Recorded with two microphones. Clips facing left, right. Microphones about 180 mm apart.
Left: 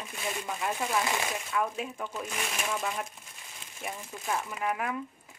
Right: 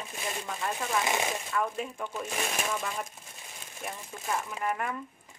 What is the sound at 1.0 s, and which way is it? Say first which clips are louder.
Speech: right 2 dB; 20° right (ahead or behind).